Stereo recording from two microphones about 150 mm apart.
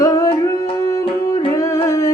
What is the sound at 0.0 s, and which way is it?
Music, 20° left (ahead or behind).